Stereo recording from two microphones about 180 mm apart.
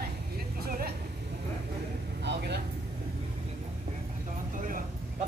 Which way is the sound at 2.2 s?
70° right (ahead or behind).